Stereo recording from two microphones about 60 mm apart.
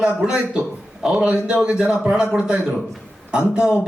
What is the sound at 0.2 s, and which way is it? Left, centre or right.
A man's voice, centre.